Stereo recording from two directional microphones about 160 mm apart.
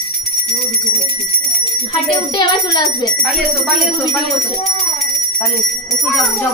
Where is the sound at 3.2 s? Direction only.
Centre (ahead or behind).